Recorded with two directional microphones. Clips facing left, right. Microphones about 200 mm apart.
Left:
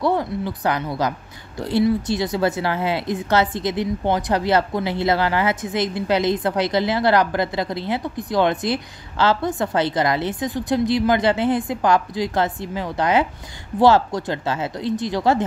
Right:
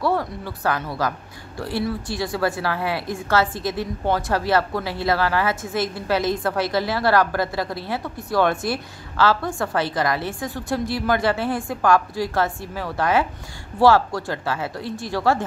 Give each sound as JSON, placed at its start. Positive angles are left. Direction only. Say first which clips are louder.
{"t": 0.0, "sound": "a woman's voice", "louder": "left 2 dB", "side_deg": 15}